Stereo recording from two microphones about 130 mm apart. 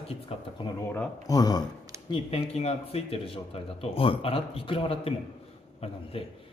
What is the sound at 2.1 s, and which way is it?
A man's voice, 45° left (ahead or behind).